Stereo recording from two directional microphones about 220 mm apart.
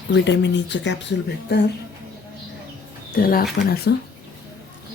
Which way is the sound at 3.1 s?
45° left (ahead or behind).